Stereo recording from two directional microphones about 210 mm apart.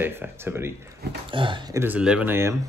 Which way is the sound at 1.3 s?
25° right (ahead or behind).